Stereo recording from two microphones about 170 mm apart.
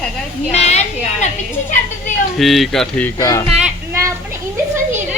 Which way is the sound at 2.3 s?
Centre (ahead or behind).